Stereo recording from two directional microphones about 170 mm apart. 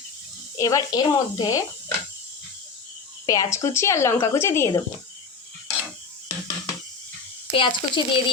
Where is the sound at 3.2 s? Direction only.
20° left (ahead or behind).